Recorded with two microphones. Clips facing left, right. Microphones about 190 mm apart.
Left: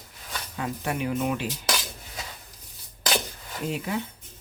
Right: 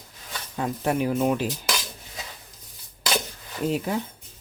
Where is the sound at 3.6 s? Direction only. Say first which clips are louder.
Right 4 dB; 40° right (ahead or behind).